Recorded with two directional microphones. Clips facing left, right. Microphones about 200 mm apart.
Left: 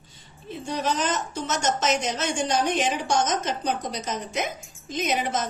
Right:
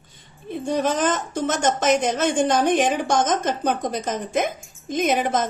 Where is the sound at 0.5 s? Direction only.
50° right (ahead or behind).